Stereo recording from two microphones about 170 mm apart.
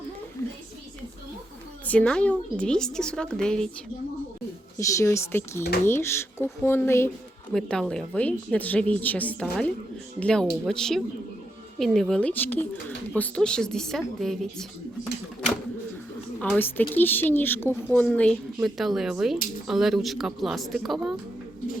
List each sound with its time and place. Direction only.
1.8 s a woman's voice: 10° left (ahead or behind)
4.8 s a woman's voice: 20° left (ahead or behind)
7.5 s a woman's voice: 5° left (ahead or behind)
16.4 s a woman's voice: 10° left (ahead or behind)